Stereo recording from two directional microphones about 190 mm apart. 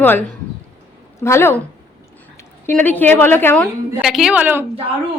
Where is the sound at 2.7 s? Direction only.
10° left (ahead or behind).